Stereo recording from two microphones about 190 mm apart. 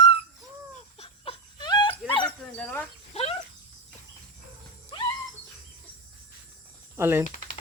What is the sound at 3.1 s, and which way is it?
Insect, 35° left (ahead or behind).